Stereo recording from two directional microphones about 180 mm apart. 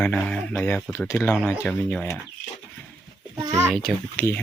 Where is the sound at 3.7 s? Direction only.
Centre (ahead or behind).